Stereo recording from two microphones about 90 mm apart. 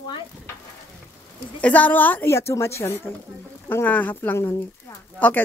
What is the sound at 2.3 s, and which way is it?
Speech, 30° left (ahead or behind).